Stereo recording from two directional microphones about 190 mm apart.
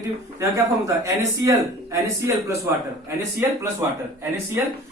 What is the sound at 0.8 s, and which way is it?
Speech, 15° right (ahead or behind).